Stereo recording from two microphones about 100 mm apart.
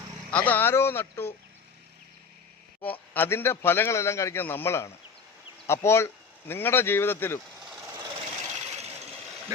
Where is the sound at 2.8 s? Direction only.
20° left (ahead or behind).